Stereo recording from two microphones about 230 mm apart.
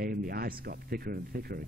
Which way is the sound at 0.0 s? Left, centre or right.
Right.